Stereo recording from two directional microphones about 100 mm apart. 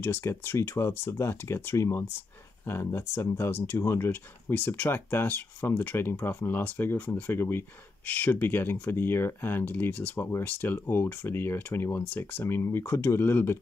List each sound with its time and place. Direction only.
0.0 s speech: 25° left (ahead or behind)